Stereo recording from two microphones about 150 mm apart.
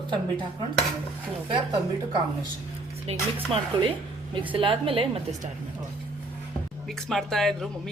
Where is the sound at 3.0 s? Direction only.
40° right (ahead or behind).